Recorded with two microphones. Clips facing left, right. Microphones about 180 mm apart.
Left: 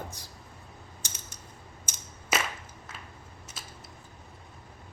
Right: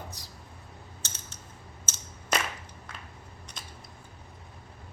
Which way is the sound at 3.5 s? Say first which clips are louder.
Even; 5° left (ahead or behind).